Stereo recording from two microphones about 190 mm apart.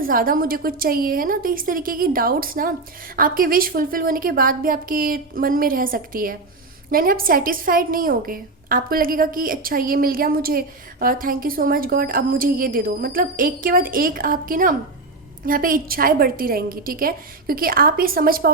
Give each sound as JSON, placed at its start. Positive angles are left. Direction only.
{"t": 0.0, "sound": "a woman's voice", "side_deg": -50}